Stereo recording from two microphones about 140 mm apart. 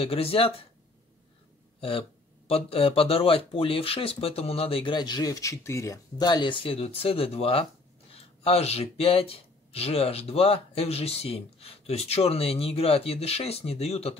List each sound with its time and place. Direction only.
0.0 s speech: 45° left (ahead or behind)
1.8 s speech: 45° left (ahead or behind)